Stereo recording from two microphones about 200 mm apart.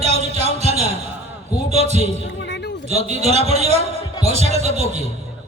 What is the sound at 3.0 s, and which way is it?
A man's voice, 35° right (ahead or behind).